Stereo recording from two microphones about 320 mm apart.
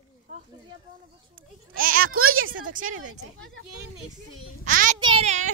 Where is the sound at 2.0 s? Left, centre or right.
Right.